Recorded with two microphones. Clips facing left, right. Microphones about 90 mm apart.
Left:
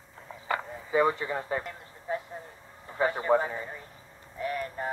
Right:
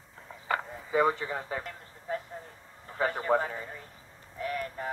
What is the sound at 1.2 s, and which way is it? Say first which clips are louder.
Speech: left 3 dB; 35° left (ahead or behind).